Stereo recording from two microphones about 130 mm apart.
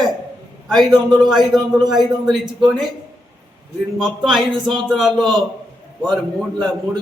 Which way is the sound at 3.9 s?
5° right (ahead or behind).